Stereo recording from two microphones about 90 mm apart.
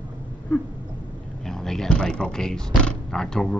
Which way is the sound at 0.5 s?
20° left (ahead or behind).